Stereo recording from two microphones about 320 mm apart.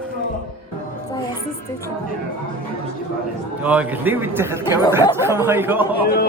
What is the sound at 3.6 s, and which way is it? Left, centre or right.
A man's voice, centre.